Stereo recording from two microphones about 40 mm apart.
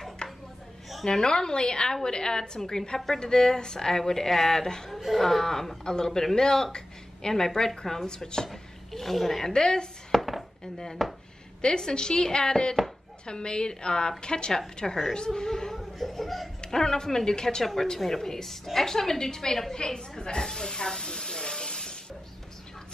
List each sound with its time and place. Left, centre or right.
0.2 s a sound: left
1.0 s a woman's voice: centre
4.9 s a man's voice: centre
8.5 s speech: centre
9.5 s a woman's voice: centre
10.1 s chopping: centre
10.6 s a woman's voice: centre
15.8 s chuckle: centre
16.6 s a man's voice: centre